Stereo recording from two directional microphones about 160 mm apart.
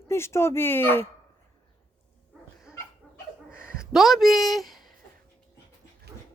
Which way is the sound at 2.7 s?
5° right (ahead or behind).